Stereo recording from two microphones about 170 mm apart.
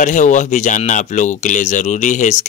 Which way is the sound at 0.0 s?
45° left (ahead or behind).